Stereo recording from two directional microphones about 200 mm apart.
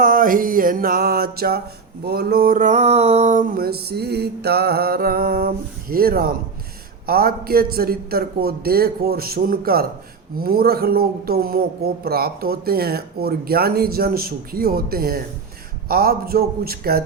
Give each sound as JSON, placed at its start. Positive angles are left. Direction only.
{"t": 0.0, "sound": "speech", "side_deg": -45}